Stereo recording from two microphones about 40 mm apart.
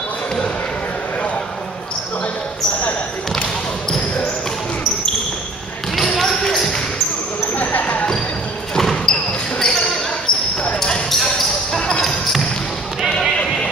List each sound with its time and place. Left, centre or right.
5.9 s basketball bounce: centre
7.5 s basketball bounce: left
8.7 s basketball bounce: centre